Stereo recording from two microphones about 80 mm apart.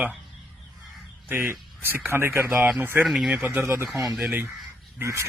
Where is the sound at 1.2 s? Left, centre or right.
Right.